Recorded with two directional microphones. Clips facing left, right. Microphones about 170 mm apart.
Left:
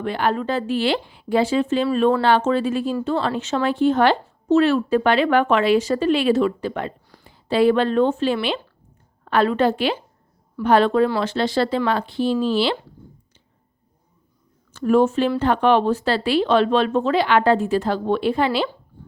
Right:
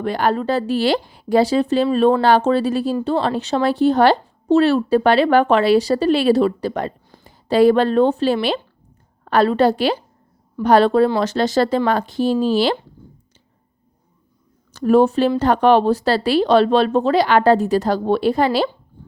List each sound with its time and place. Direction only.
0.0 s speech: 40° right (ahead or behind)
14.7 s speech: 35° right (ahead or behind)